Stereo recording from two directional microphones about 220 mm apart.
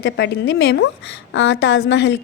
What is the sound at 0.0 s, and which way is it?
Speech, 45° left (ahead or behind).